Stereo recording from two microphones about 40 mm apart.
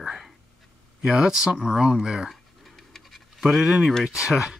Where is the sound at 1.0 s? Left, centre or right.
Centre.